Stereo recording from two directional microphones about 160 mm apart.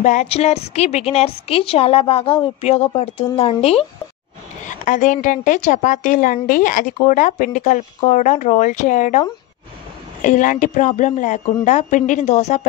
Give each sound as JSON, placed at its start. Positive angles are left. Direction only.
{"t": 0.0, "sound": "a woman's voice", "side_deg": 45}
{"t": 4.6, "sound": "a woman's voice", "side_deg": 50}
{"t": 10.2, "sound": "a woman's voice", "side_deg": 55}